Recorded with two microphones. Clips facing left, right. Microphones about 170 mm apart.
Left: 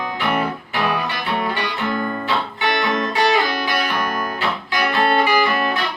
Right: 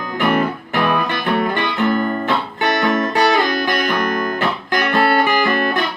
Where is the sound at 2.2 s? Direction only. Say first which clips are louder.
Right 3 dB; 50° right (ahead or behind).